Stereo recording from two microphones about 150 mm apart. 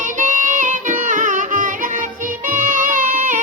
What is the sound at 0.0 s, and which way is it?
Music, 55° right (ahead or behind).